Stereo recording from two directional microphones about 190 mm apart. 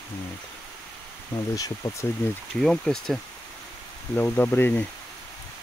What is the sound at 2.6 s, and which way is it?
Speech, centre (ahead or behind).